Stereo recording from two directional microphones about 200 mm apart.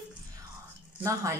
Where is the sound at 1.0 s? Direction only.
15° right (ahead or behind).